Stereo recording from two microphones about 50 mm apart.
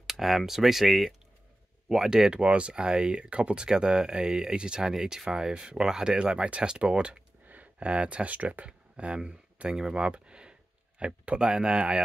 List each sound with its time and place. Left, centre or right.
0.0 s speech: centre; by 7.2 s right
7.4 s a sound: right
7.9 s speech: right